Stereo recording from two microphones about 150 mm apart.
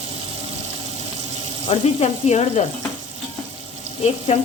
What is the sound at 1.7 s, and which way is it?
Speech, 45° left (ahead or behind).